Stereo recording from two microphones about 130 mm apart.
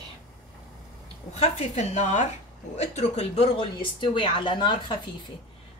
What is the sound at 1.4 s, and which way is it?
Speech, 55° left (ahead or behind).